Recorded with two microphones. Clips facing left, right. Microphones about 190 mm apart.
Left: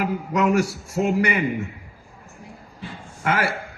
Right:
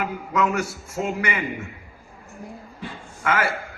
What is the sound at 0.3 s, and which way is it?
Speech, 35° left (ahead or behind).